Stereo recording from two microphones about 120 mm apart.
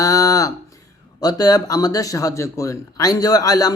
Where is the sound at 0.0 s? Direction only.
30° left (ahead or behind).